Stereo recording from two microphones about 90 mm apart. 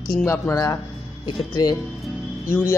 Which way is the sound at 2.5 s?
30° left (ahead or behind).